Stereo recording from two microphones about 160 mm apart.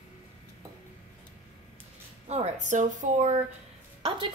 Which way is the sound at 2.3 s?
45° right (ahead or behind).